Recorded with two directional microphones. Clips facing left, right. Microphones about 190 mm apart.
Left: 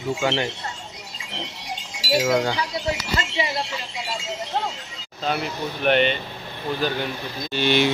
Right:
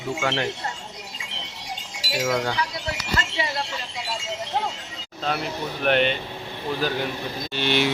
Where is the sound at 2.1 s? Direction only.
10° left (ahead or behind).